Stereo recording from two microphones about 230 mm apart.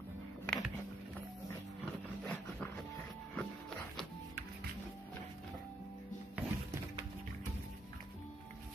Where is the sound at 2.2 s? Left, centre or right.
Centre.